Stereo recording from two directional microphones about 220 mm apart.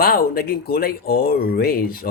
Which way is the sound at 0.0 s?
40° left (ahead or behind).